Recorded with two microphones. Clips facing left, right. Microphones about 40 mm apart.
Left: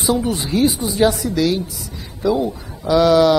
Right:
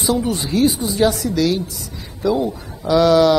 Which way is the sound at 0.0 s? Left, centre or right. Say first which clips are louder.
Even; centre.